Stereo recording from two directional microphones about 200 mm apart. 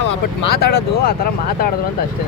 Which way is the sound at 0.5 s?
50° left (ahead or behind).